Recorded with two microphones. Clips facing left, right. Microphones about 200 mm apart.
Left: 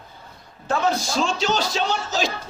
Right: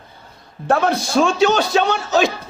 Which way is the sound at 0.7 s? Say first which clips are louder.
Right 5 dB; 60° right (ahead or behind).